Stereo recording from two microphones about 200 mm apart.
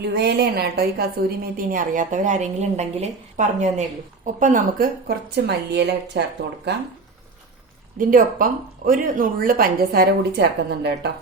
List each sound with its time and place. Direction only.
0.0 s a woman's voice: 55° right (ahead or behind)
7.9 s a woman's voice: 40° right (ahead or behind)